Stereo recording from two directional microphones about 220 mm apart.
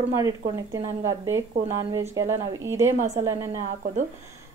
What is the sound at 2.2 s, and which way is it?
Speech, 10° right (ahead or behind).